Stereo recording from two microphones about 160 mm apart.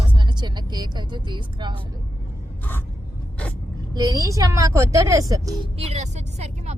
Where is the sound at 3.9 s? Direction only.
25° right (ahead or behind).